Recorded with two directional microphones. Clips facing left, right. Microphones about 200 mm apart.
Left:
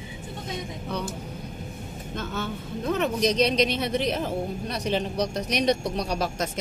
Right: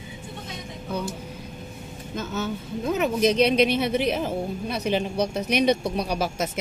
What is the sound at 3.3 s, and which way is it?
Speech, 55° right (ahead or behind).